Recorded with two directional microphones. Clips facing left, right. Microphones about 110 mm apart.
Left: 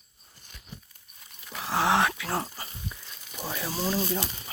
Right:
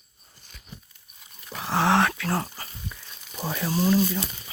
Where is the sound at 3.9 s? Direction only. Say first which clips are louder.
Right 6 dB; 20° left (ahead or behind).